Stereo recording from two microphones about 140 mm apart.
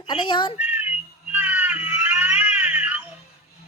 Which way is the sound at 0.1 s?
35° left (ahead or behind).